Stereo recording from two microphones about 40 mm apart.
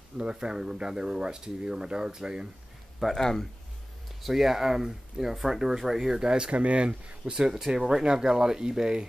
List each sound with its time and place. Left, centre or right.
0.2 s speech: right
3.0 s speech: centre
4.2 s speech: centre
6.2 s speech: right
6.5 s speech: right; by 9.0 s centre